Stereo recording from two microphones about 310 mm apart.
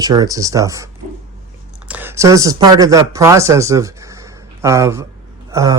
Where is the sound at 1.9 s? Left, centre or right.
Centre.